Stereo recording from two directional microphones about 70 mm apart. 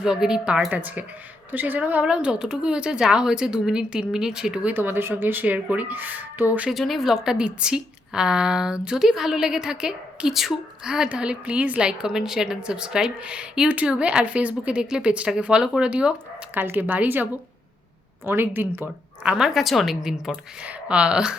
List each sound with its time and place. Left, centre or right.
0.0 s a woman's voice: centre
0.7 s speech: right
2.0 s a woman's voice: centre
4.6 s speech: right
6.7 s a woman's voice: centre
16.6 s speech: right
18.3 s speech: right
19.2 s a woman's voice: centre
19.5 s a woman's voice: centre
20.7 s a woman's voice: centre